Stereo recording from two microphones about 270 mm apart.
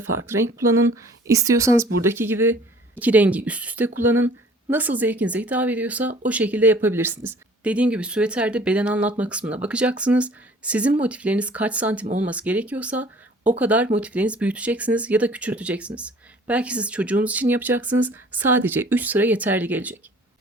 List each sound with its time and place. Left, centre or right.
1.3 s speech: centre